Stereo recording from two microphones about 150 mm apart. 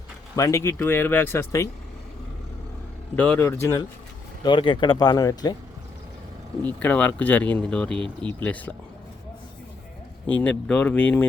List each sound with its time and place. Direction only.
0.3 s speech: 20° left (ahead or behind)
3.2 s speech: 10° left (ahead or behind)
4.4 s speech: 35° left (ahead or behind)
6.6 s speech: 10° left (ahead or behind)
10.2 s speech: 10° left (ahead or behind)